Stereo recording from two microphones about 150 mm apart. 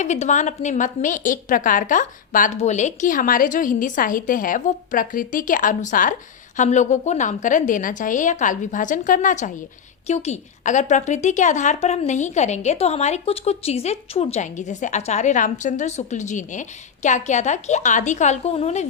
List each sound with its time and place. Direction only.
0.0 s a woman's voice: 50° left (ahead or behind)
2.6 s a woman's voice: 50° left (ahead or behind)
6.6 s a woman's voice: 50° left (ahead or behind)